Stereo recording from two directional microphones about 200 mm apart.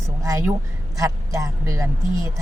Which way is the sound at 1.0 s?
15° right (ahead or behind).